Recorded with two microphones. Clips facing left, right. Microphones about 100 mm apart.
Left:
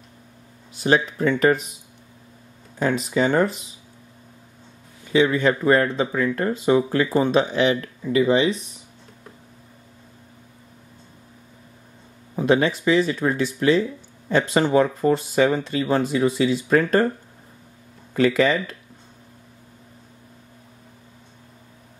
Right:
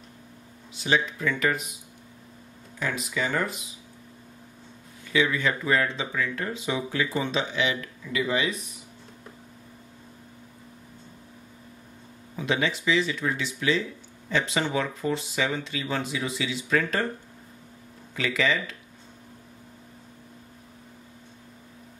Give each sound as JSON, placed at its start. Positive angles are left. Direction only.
{"t": 0.7, "sound": "speech", "side_deg": 45}
{"t": 2.8, "sound": "speech", "side_deg": 35}
{"t": 5.1, "sound": "speech", "side_deg": 35}
{"t": 12.4, "sound": "speech", "side_deg": 45}
{"t": 18.1, "sound": "speech", "side_deg": 45}